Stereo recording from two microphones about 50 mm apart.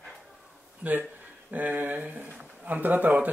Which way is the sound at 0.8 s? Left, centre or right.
Right.